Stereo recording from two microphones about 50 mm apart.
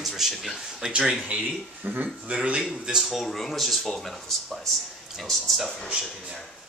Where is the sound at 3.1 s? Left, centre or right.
Centre.